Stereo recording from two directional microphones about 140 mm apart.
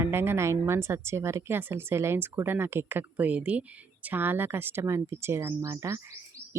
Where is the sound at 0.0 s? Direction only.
15° right (ahead or behind).